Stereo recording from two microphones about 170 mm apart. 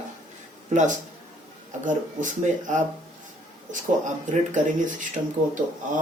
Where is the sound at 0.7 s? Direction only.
50° right (ahead or behind).